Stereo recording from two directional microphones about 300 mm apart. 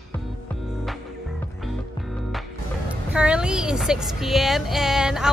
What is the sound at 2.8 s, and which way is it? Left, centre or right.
Speech, centre.